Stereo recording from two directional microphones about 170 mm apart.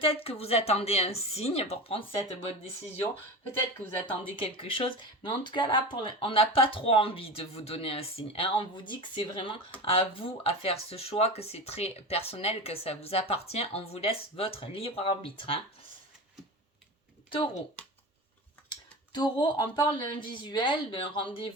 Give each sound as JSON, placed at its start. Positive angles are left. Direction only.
{"t": 0.0, "sound": "speech", "side_deg": 35}
{"t": 4.0, "sound": "speech", "side_deg": 30}
{"t": 17.3, "sound": "speech", "side_deg": 30}
{"t": 18.7, "sound": "speech", "side_deg": 25}